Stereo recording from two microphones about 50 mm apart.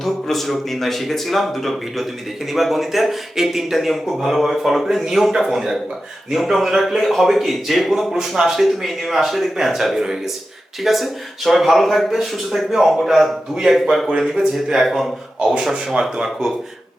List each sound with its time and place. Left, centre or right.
0.0 s a man's voice: centre
15.4 s speech: right
16.0 s speech: centre